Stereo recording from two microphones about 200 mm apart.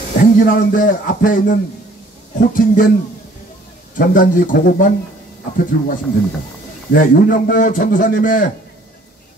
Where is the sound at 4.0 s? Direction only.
45° left (ahead or behind).